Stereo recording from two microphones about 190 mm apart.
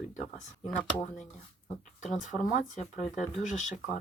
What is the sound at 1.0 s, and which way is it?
Speech, 40° left (ahead or behind).